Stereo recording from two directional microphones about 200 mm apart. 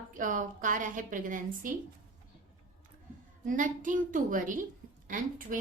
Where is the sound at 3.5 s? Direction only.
40° right (ahead or behind).